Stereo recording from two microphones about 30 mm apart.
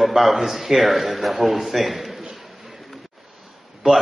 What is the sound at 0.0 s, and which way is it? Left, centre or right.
A man's voice, centre.